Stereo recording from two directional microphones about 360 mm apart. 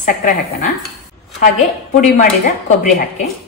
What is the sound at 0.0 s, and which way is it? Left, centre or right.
Speech, left.